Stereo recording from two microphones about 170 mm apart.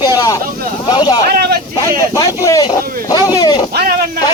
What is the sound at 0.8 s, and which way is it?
Speech, 25° left (ahead or behind).